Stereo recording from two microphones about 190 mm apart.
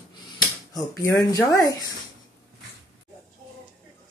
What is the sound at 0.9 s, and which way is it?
Speech, 15° left (ahead or behind).